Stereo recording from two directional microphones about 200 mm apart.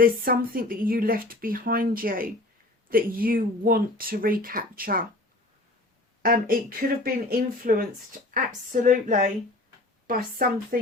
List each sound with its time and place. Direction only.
0.0 s speech: 45° right (ahead or behind)
6.2 s speech: 45° right (ahead or behind)